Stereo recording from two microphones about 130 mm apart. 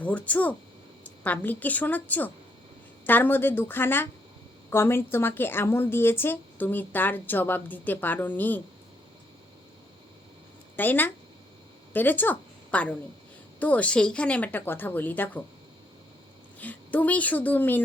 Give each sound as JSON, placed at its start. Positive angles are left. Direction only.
{"t": 0.0, "sound": "speech", "side_deg": 10}
{"t": 10.8, "sound": "speech", "side_deg": 15}
{"t": 16.6, "sound": "speech", "side_deg": 10}